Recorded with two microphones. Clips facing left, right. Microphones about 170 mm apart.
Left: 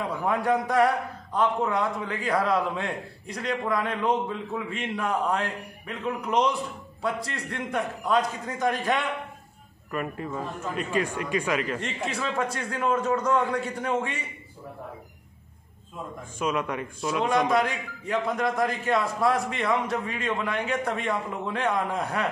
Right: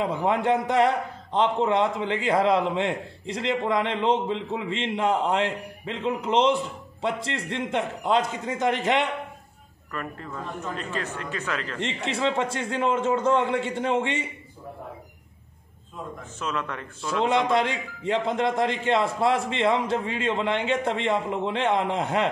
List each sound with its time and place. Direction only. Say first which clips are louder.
0.0 s a man's voice: right 3 dB; 25° right (ahead or behind)
9.8 s a man's voice: left 4 dB; 15° left (ahead or behind)
11.8 s a man's voice: right 4 dB; 25° right (ahead or behind)
16.3 s a man's voice: left 4 dB; 10° left (ahead or behind)
17.2 s a man's voice: right 1 dB; 25° right (ahead or behind)